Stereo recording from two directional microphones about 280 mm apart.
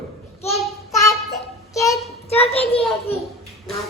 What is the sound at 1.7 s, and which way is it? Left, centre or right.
Child singing, centre.